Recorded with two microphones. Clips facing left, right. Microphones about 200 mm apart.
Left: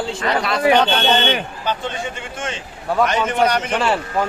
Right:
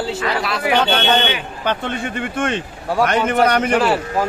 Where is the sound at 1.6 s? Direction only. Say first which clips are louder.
Right 4 dB; 60° right (ahead or behind).